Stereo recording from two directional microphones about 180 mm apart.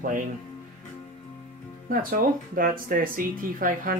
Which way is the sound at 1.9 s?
50° right (ahead or behind).